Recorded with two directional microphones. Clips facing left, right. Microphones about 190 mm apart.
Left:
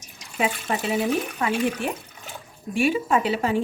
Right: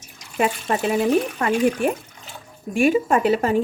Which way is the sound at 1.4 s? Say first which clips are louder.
Right 5 dB; 50° right (ahead or behind).